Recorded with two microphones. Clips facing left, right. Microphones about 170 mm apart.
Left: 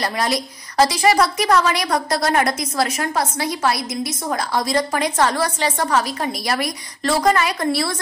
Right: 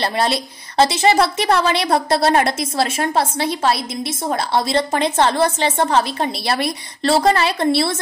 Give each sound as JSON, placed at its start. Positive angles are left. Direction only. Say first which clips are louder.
{"t": 0.0, "sound": "a woman's voice", "louder": "right 2 dB", "side_deg": -25}